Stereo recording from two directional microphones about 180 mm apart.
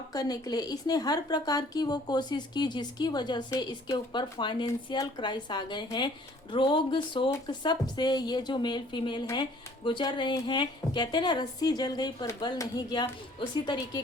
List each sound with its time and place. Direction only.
0.1 s a woman's voice: 20° left (ahead or behind)